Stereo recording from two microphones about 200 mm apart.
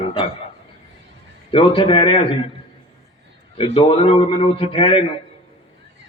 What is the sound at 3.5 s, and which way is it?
A man's voice, 25° left (ahead or behind).